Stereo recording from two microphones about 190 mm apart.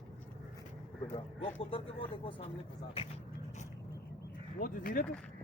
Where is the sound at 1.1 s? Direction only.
30° left (ahead or behind).